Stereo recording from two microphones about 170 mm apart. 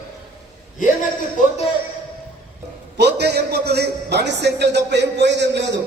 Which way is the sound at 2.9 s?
75° right (ahead or behind).